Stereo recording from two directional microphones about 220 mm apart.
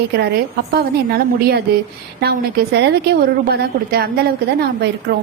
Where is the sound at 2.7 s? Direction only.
50° right (ahead or behind).